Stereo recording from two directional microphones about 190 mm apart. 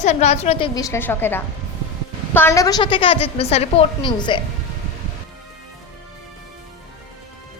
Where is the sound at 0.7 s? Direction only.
20° left (ahead or behind).